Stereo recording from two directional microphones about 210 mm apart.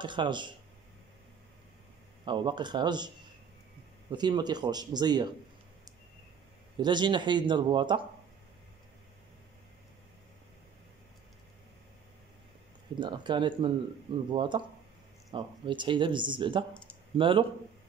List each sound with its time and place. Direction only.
0.0 s speech: 20° right (ahead or behind)
2.2 s speech: 20° right (ahead or behind)
4.1 s speech: 20° right (ahead or behind)
6.8 s speech: 20° right (ahead or behind)
13.0 s speech: 20° right (ahead or behind)